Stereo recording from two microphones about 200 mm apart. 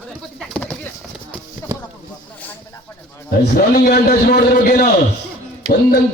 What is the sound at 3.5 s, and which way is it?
A man's voice, 50° left (ahead or behind).